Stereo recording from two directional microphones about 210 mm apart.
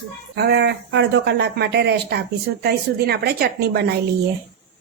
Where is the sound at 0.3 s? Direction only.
50° right (ahead or behind).